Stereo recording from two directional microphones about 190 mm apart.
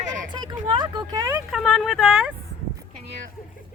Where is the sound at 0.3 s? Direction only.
20° right (ahead or behind).